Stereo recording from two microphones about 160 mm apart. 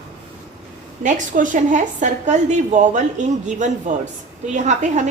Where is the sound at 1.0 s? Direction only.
50° right (ahead or behind).